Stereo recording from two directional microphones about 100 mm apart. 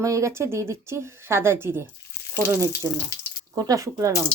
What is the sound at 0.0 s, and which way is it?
Speech, 30° right (ahead or behind).